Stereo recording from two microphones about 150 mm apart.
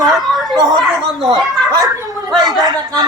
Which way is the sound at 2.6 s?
25° right (ahead or behind).